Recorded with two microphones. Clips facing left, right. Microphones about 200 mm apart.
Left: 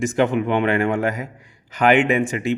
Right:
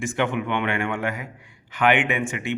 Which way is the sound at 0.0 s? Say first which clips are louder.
Left 6 dB; 40° left (ahead or behind).